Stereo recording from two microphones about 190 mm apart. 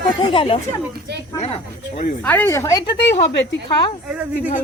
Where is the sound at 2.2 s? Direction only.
10° left (ahead or behind).